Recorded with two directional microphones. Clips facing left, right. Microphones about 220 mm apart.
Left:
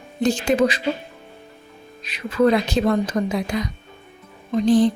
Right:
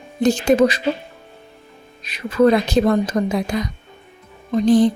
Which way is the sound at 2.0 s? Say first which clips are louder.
Right 3 dB; 45° right (ahead or behind).